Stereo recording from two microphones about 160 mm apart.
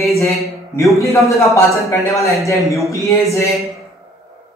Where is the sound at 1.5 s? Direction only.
20° left (ahead or behind).